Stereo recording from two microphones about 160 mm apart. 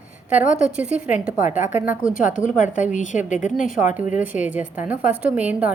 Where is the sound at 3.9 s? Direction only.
10° right (ahead or behind).